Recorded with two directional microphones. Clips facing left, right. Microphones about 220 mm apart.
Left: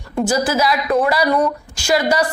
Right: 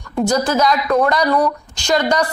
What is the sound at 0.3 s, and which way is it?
A woman's voice, 5° left (ahead or behind).